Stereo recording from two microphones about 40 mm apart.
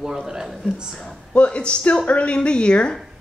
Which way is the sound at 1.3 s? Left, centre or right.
Left.